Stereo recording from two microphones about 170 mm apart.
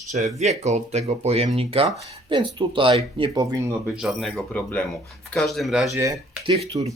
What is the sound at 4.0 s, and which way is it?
Speech, centre (ahead or behind).